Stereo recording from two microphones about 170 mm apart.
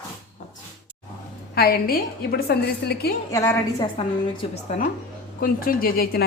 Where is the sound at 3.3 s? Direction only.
20° left (ahead or behind).